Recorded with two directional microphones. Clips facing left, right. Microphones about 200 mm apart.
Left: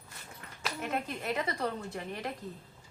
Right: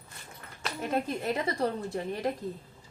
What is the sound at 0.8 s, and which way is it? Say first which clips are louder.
Speech: right 6 dB; 35° right (ahead or behind).